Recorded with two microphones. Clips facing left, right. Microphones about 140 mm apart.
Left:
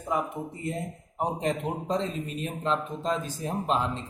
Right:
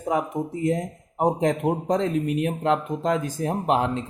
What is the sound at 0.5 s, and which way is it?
A man's voice, 80° right.